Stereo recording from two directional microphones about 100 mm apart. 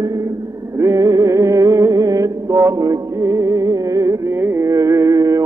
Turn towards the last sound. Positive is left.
turn(degrees=-35)  # may be behind; listen again after turning